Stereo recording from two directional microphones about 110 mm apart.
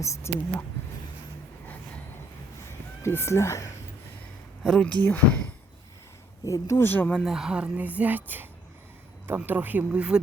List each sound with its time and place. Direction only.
0.0 s speech: 25° left (ahead or behind)
3.0 s speech: 25° left (ahead or behind)
4.6 s speech: 5° left (ahead or behind)
6.4 s a woman's voice: 30° left (ahead or behind)
6.8 s speech: 15° left (ahead or behind)
7.3 s a woman's voice: 5° right (ahead or behind)